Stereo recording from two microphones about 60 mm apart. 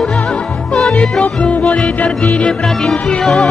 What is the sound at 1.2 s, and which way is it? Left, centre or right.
Music, left.